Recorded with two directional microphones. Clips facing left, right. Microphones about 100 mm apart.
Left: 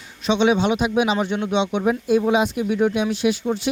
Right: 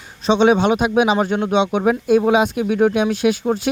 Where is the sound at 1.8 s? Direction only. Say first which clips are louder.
Right 4 dB; 60° right (ahead or behind).